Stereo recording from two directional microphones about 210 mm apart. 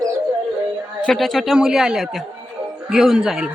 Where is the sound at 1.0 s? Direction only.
Centre (ahead or behind).